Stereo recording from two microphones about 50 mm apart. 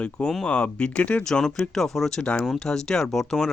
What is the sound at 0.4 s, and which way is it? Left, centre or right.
Speech, left.